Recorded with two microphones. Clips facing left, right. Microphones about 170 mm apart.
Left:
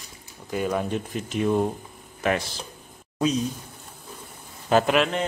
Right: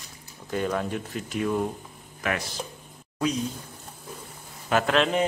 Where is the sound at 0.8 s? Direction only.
25° left (ahead or behind).